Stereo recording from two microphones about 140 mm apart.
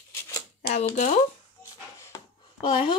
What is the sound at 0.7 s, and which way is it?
Speech, 60° left (ahead or behind).